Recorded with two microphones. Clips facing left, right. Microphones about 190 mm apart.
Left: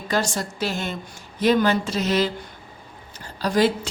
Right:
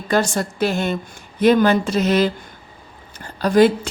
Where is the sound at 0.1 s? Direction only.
55° right (ahead or behind).